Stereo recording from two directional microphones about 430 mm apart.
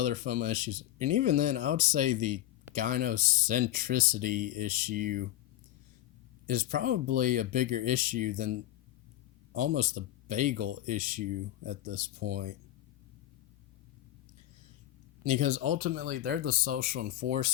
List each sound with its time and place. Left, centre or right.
0.0 s speech: centre
6.5 s speech: centre
15.2 s speech: centre